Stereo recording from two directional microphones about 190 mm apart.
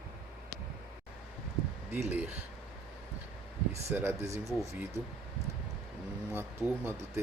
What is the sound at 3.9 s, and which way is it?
Speech, 10° right (ahead or behind).